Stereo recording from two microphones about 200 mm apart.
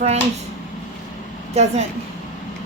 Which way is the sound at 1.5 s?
35° right (ahead or behind).